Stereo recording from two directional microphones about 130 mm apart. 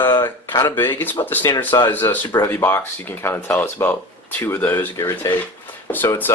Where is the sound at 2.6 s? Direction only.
15° left (ahead or behind).